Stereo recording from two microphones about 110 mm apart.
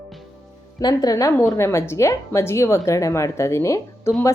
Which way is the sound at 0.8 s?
35° left (ahead or behind).